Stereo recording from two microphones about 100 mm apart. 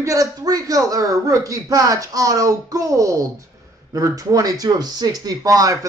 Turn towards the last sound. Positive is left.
turn(degrees=-35)  # may be behind; listen again after turning